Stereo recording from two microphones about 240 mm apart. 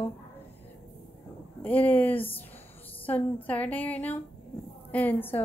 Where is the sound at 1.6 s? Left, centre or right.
Centre.